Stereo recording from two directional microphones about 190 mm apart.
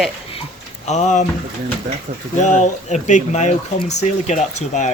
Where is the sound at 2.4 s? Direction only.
40° left (ahead or behind).